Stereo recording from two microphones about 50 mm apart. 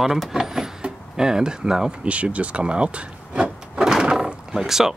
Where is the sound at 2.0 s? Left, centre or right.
Right.